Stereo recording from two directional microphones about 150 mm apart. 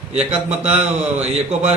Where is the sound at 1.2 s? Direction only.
45° right (ahead or behind).